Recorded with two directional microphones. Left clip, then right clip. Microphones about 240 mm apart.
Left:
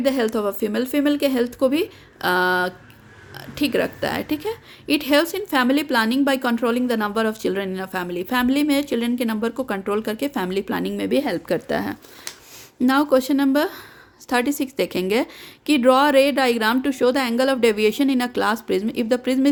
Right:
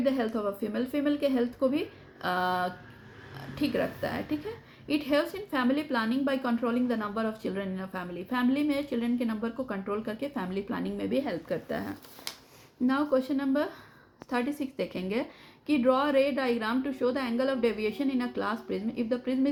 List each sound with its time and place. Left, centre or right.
0.0 s a woman's voice: left